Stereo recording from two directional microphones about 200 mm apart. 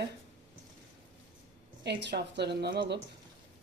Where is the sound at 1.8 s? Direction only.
60° right (ahead or behind).